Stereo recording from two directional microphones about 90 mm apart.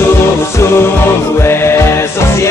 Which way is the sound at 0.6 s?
25° left (ahead or behind).